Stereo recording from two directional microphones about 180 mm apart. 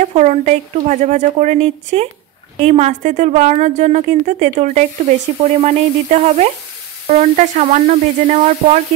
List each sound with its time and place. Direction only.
0.0 s a woman's voice: 40° right (ahead or behind)